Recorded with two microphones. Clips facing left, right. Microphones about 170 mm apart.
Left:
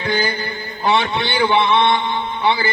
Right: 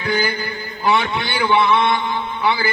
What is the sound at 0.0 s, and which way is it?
Mantra, 30° left (ahead or behind).